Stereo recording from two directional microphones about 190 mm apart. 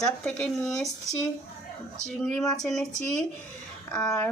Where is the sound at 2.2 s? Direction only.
5° left (ahead or behind).